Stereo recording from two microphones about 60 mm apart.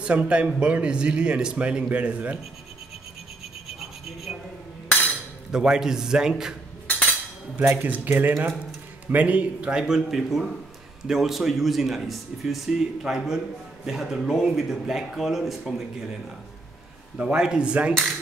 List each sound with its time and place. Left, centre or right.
0.0 s speech: centre
3.6 s rub: centre
4.8 s a sound: left
5.5 s speech: centre
6.9 s a sound: left
7.7 s speech: right; by 16.2 s centre
17.2 s speech: centre